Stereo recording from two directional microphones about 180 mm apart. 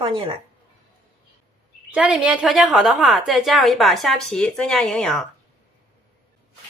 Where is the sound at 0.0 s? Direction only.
30° right (ahead or behind).